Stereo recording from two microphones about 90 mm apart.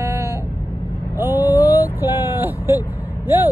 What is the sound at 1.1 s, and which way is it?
Vehicle, 20° right (ahead or behind).